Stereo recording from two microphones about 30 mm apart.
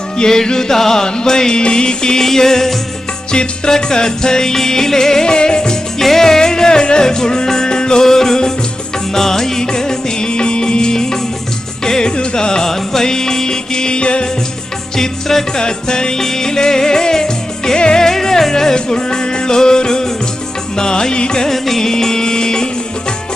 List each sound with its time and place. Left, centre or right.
0.2 s music: left
2.2 s music: centre
6.0 s music: centre; by 8.0 s left
8.0 s music: centre; by 14.3 s left
14.9 s music: centre
15.5 s music: left
21.5 s music: centre